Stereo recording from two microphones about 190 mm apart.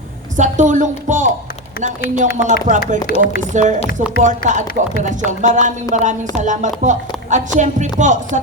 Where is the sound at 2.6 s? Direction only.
40° right (ahead or behind).